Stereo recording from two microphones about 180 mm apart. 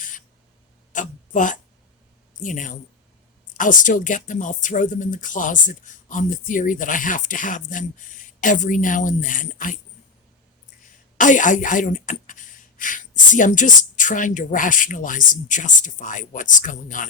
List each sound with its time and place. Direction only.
0.9 s a sound: 45° left (ahead or behind)
2.4 s speech: 45° left (ahead or behind)
11.2 s speech: 45° left (ahead or behind)